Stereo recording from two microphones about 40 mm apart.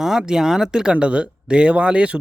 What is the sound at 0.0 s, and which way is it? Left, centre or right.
Speech, centre.